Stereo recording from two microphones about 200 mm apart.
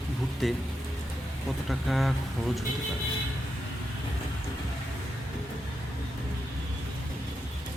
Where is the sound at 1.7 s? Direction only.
Centre (ahead or behind).